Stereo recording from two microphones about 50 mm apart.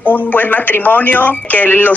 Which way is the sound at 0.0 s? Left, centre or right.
Left.